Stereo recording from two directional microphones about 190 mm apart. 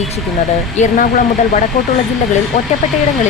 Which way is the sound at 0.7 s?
40° left (ahead or behind).